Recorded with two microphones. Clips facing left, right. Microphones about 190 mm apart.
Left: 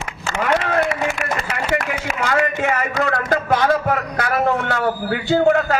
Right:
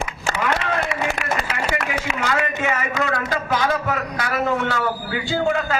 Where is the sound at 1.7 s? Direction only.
50° left (ahead or behind).